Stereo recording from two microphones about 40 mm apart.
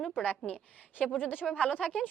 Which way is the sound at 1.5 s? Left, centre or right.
Left.